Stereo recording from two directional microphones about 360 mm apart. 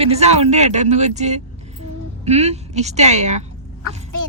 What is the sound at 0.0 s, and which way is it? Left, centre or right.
Speech, centre.